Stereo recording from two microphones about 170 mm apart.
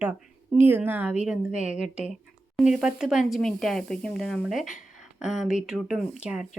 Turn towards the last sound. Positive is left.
turn(degrees=-5)  # may be behind; listen again after turning